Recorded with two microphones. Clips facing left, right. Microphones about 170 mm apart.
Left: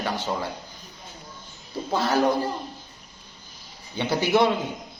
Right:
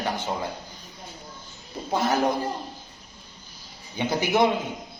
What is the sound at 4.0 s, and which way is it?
Speech, 15° right (ahead or behind).